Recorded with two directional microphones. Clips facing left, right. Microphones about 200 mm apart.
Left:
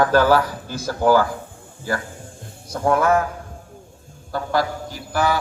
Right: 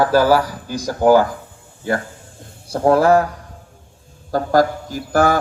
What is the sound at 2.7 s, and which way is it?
Speech, 35° right (ahead or behind).